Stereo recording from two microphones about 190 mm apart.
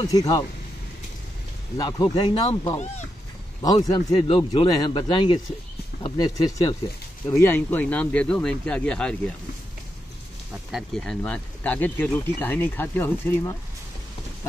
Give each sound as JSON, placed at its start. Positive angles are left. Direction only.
{"t": 0.1, "sound": "speech", "side_deg": 20}
{"t": 1.8, "sound": "speech", "side_deg": 25}
{"t": 10.7, "sound": "speech", "side_deg": 0}